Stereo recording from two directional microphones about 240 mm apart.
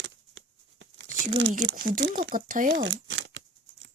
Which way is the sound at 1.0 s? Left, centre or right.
Right.